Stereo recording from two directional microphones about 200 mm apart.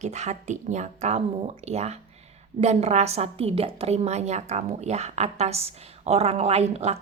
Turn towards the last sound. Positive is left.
turn(degrees=-30)  # may be behind; listen again after turning